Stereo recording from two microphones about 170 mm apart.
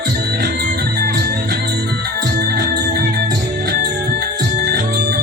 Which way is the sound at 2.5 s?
55° right (ahead or behind).